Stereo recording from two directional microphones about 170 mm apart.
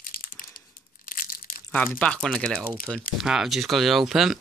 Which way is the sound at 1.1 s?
55° left (ahead or behind).